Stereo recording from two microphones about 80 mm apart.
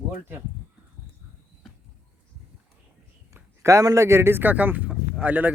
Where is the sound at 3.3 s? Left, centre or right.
Right; by 5.5 s centre.